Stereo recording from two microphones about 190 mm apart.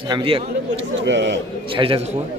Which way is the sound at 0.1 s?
30° right (ahead or behind).